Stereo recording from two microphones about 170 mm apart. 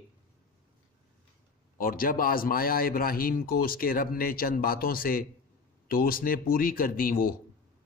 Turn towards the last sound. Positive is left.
turn(degrees=60)  # may be behind; listen again after turning